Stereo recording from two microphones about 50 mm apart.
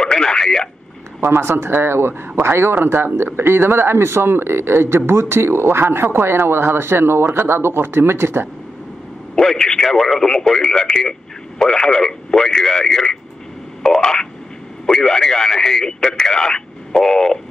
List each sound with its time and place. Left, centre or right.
0.0 s radio: centre
1.2 s speech: right
9.3 s speech: centre